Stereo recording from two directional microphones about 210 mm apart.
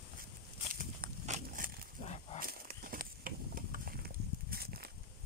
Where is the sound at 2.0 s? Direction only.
30° left (ahead or behind).